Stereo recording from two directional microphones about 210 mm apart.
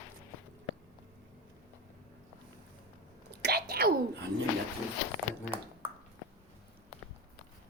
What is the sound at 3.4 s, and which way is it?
Whispering, 50° right (ahead or behind).